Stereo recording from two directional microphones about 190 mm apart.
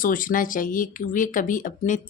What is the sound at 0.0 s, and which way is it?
Speech, 45° left (ahead or behind).